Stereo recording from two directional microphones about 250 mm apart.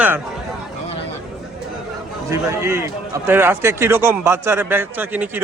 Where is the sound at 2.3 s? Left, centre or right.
Centre.